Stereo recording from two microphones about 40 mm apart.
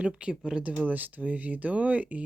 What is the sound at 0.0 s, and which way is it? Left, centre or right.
Speech, right.